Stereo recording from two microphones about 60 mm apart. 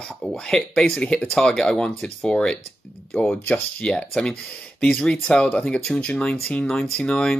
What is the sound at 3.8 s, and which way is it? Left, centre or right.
Speech, centre.